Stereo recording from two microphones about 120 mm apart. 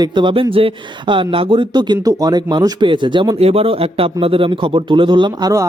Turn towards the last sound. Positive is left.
turn(degrees=-35)  # may be behind; listen again after turning